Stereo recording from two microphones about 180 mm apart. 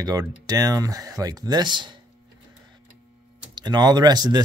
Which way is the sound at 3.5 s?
25° right (ahead or behind).